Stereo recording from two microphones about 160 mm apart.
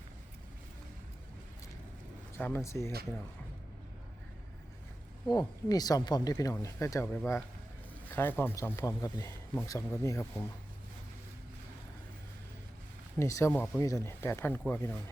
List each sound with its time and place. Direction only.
2.4 s a man's voice: 15° left (ahead or behind)
5.3 s a man's voice: 25° left (ahead or behind)
13.1 s a man's voice: 20° left (ahead or behind)